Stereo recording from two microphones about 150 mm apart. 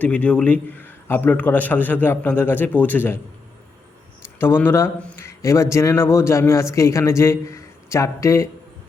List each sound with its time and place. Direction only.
0.0 s a man's voice: 10° left (ahead or behind)
4.4 s speech: 15° left (ahead or behind)